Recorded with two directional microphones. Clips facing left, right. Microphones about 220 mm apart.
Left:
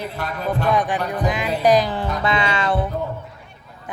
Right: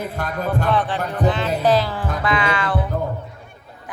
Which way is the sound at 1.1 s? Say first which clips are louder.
Right 2 dB; 15° left (ahead or behind).